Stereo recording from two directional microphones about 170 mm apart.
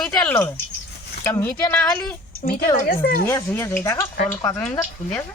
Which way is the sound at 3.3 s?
15° left (ahead or behind).